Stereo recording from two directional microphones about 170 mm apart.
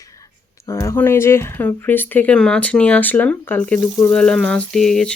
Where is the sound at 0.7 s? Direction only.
15° left (ahead or behind).